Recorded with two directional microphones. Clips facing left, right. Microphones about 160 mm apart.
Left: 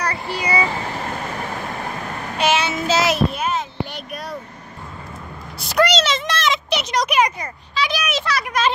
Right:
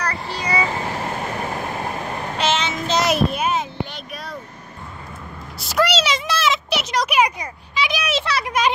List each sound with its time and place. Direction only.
0.0 s vehicle: 10° left (ahead or behind)
2.3 s child singing: 10° left (ahead or behind); by 3.6 s 5° right (ahead or behind)
3.9 s vehicle: 5° left (ahead or behind)
5.6 s a sound: 5° right (ahead or behind); by 8.5 s 25° right (ahead or behind)